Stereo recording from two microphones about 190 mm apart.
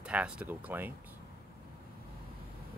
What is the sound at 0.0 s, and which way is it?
Speech, 5° right (ahead or behind).